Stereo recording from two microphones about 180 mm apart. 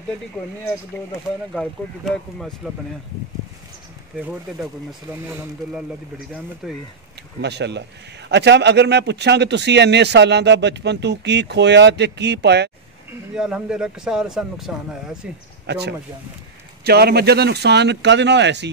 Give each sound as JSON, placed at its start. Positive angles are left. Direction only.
{"t": 1.5, "sound": "a man's voice", "side_deg": 0}
{"t": 5.3, "sound": "a man's voice", "side_deg": -5}
{"t": 7.4, "sound": "speech", "side_deg": -70}
{"t": 13.3, "sound": "a man's voice", "side_deg": -5}
{"t": 15.6, "sound": "speech", "side_deg": -70}